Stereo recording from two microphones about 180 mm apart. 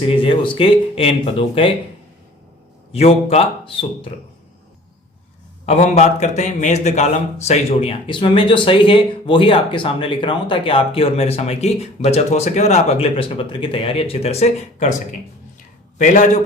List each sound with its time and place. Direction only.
0.1 s a man's voice: 30° left (ahead or behind)
2.9 s a man's voice: 35° left (ahead or behind)
5.6 s a man's voice: 35° left (ahead or behind)
16.0 s a man's voice: 45° left (ahead or behind)